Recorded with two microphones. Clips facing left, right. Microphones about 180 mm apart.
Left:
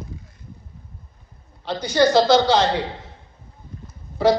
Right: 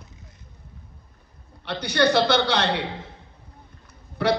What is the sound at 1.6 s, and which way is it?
A man's voice, 65° right (ahead or behind).